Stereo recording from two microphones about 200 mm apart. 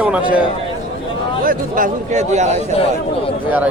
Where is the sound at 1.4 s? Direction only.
45° right (ahead or behind).